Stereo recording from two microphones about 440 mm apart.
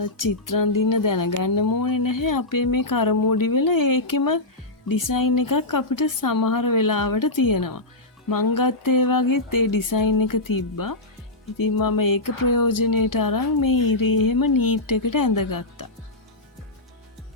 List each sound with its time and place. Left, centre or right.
0.0 s speech: left